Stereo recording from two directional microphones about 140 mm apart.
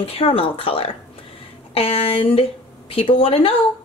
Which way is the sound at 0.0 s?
45° left (ahead or behind).